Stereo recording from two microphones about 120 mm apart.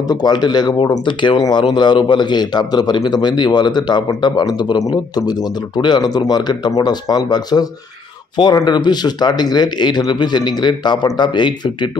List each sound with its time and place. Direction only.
0.1 s a man's voice: 35° left (ahead or behind)